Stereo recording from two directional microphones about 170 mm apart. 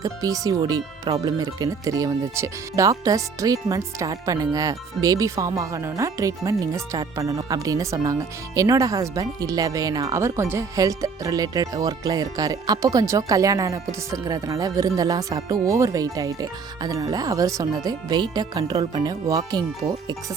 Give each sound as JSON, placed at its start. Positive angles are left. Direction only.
{"t": 0.0, "sound": "speech", "side_deg": -20}